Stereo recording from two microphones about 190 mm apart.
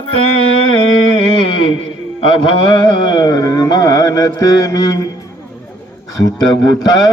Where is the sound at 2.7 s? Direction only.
25° left (ahead or behind).